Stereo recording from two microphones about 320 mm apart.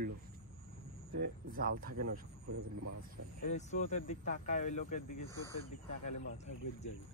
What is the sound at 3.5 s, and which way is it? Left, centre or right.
Speech, left.